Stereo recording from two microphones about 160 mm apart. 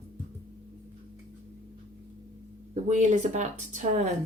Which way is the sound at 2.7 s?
50° right (ahead or behind).